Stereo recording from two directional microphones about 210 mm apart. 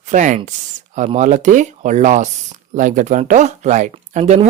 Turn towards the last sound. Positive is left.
turn(degrees=-35)  # may be behind; listen again after turning